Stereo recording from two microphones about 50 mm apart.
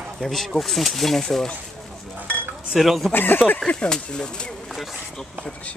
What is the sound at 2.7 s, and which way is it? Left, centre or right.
Speech, centre.